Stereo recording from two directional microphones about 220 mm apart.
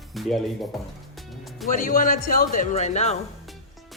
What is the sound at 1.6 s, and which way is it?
Speech, 35° left (ahead or behind).